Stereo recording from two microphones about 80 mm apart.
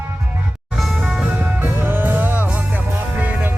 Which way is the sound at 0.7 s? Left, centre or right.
Centre.